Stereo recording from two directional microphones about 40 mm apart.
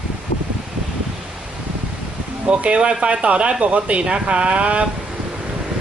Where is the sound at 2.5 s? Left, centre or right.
Right.